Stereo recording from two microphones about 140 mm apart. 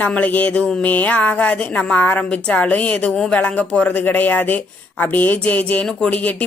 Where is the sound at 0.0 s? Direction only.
10° left (ahead or behind).